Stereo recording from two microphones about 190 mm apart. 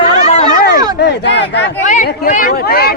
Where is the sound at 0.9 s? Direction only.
60° left (ahead or behind).